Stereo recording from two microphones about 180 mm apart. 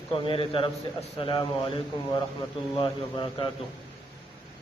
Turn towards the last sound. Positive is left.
turn(degrees=25)  # may be behind; listen again after turning